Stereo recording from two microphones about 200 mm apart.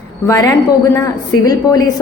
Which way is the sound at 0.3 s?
15° left (ahead or behind).